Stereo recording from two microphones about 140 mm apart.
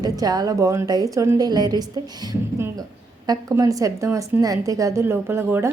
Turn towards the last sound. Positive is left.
turn(degrees=-15)  # may be behind; listen again after turning